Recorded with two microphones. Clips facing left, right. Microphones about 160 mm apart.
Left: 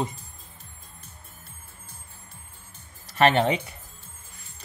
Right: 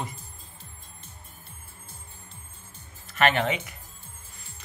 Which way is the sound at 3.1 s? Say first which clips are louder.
Left 4 dB; 30° left (ahead or behind).